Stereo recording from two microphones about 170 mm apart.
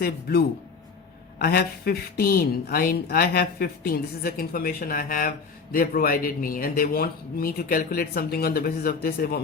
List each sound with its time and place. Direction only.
0.0 s speech: 65° left (ahead or behind)